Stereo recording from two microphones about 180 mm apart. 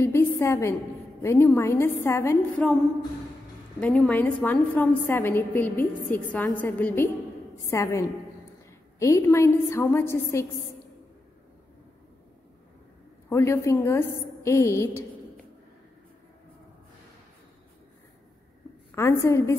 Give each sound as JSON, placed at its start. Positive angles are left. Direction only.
{"t": 0.0, "sound": "a woman's voice", "side_deg": 15}
{"t": 3.8, "sound": "a woman's voice", "side_deg": 5}
{"t": 9.0, "sound": "a woman's voice", "side_deg": 15}
{"t": 13.3, "sound": "a woman's voice", "side_deg": 15}
{"t": 18.9, "sound": "a woman's voice", "side_deg": 15}